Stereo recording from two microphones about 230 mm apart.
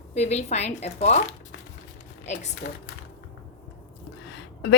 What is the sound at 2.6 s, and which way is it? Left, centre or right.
Speech, left.